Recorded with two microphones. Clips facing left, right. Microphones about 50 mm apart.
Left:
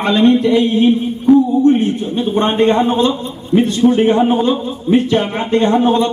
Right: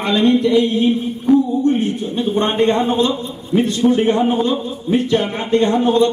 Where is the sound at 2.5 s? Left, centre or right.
Centre.